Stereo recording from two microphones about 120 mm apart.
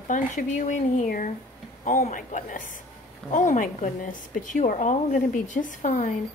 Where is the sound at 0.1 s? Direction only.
90° left.